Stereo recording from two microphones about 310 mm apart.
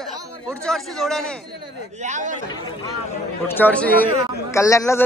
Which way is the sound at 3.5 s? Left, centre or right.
Centre.